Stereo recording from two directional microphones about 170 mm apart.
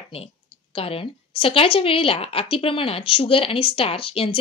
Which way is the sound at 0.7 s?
35° left (ahead or behind).